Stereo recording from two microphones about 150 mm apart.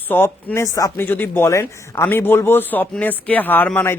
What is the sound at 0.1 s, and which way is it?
Speech, 15° left (ahead or behind).